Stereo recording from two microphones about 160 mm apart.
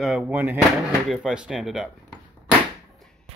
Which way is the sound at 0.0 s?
Centre (ahead or behind).